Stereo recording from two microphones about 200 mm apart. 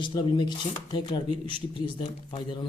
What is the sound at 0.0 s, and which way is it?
Speech, 25° left (ahead or behind).